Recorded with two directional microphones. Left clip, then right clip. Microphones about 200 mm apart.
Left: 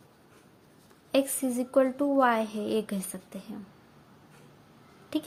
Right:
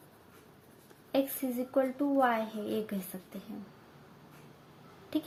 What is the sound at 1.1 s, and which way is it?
A woman's voice, 40° left (ahead or behind).